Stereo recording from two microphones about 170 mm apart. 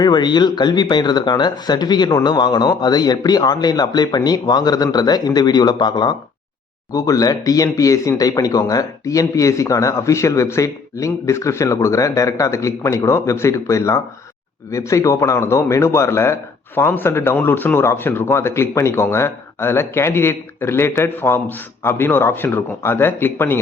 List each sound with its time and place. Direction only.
0.0 s speech: 25° left (ahead or behind)